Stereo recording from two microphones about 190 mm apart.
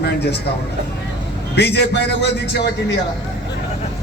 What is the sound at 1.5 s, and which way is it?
A man's voice, 60° left (ahead or behind).